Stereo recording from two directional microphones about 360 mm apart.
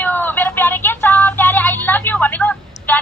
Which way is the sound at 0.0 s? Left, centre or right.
Centre.